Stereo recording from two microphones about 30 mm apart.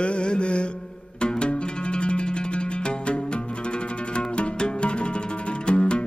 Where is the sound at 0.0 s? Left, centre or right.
Left.